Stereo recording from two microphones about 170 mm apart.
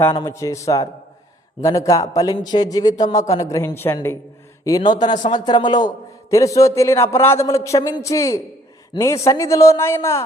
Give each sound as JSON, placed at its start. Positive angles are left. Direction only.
{"t": 0.2, "sound": "a man's voice", "side_deg": 20}